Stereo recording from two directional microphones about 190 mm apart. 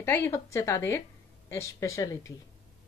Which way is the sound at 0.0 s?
10° left (ahead or behind).